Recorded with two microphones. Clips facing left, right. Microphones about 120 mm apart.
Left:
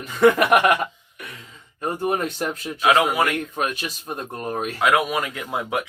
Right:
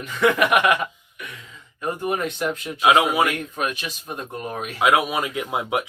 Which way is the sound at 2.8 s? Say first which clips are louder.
Right 1 dB; 15° right (ahead or behind).